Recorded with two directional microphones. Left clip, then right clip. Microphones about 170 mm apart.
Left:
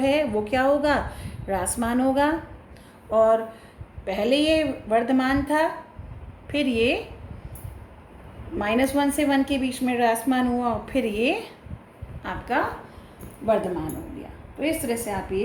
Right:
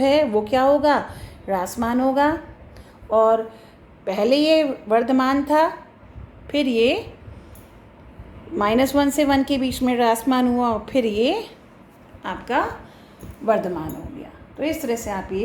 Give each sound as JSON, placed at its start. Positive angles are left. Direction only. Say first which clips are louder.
{"t": 0.0, "sound": "a woman's voice", "louder": "right 5 dB", "side_deg": -40}
{"t": 4.0, "sound": "a woman's voice", "louder": "right 4 dB", "side_deg": -35}
{"t": 8.5, "sound": "a woman's voice", "louder": "right 4 dB", "side_deg": -45}
{"t": 12.2, "sound": "a woman's voice", "louder": "right 3 dB", "side_deg": -40}